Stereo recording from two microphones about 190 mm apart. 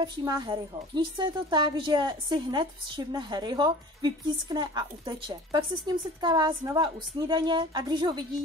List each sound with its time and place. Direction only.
0.0 s a woman's voice: 20° right (ahead or behind)